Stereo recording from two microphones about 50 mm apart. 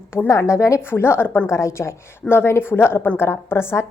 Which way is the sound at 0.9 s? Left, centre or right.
Left.